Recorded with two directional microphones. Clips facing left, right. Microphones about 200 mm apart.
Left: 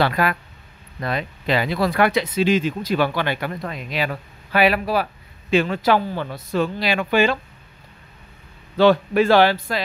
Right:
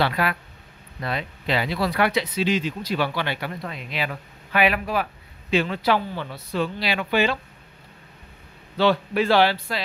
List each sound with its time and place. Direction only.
0.0 s speech: 45° left (ahead or behind)
5.5 s speech: 50° left (ahead or behind)
8.7 s speech: 50° left (ahead or behind)